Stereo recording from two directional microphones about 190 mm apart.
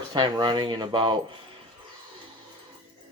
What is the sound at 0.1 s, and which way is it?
Speech, 25° right (ahead or behind).